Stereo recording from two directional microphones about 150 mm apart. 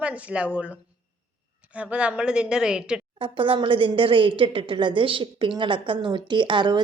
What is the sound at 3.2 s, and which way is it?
A woman's voice, 35° right (ahead or behind).